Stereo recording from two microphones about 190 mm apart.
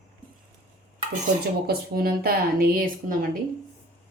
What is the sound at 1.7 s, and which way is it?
A woman's voice, 55° right (ahead or behind).